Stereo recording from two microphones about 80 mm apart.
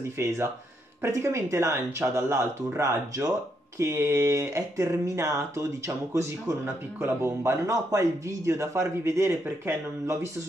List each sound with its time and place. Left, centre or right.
0.2 s speech: right
6.6 s speech: right